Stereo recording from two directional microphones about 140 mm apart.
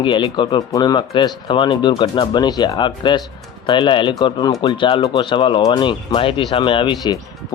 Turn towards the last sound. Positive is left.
turn(degrees=35)  # may be behind; listen again after turning